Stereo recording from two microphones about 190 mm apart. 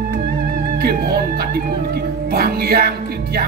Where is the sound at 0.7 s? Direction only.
55° right (ahead or behind).